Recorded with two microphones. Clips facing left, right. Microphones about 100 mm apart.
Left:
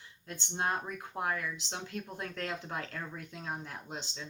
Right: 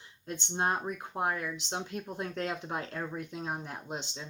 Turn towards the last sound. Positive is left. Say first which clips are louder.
# right 3 dB
turn(degrees=-20)  # may be behind; listen again after turning